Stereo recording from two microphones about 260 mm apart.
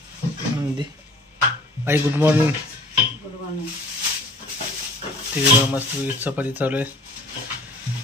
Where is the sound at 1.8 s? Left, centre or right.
Centre.